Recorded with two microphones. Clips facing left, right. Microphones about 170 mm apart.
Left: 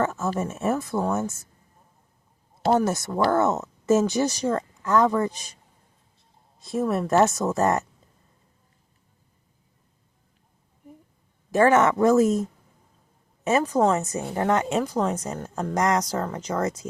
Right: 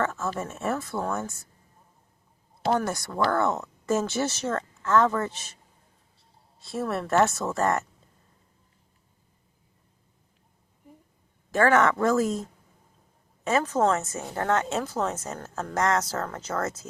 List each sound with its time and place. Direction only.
0.0 s a sound: 20° left (ahead or behind)
0.3 s speech: 20° left (ahead or behind)
2.7 s speech: 20° left (ahead or behind)
6.6 s speech: 20° left (ahead or behind)
11.5 s speech: 20° left (ahead or behind)